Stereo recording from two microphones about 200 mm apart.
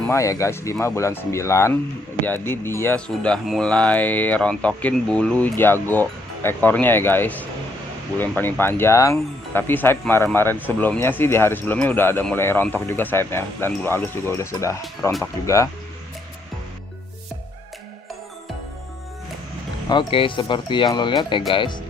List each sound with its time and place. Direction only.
0.1 s speech: 15° left (ahead or behind)
19.9 s speech: 25° left (ahead or behind)